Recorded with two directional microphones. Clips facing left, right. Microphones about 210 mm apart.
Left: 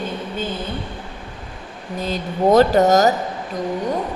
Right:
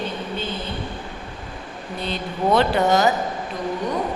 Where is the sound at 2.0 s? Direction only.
40° left (ahead or behind).